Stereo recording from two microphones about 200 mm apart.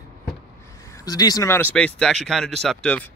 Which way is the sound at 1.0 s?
20° left (ahead or behind).